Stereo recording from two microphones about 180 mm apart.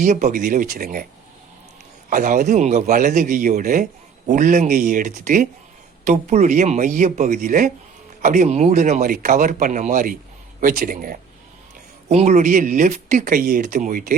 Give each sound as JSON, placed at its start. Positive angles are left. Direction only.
{"t": 0.0, "sound": "speech", "side_deg": -40}
{"t": 2.0, "sound": "speech", "side_deg": -45}
{"t": 12.0, "sound": "speech", "side_deg": -40}